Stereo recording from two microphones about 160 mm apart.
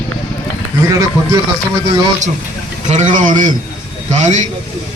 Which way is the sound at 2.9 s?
50° right (ahead or behind).